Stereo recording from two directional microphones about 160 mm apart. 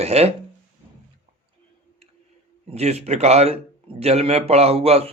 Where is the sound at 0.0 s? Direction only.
40° right (ahead or behind).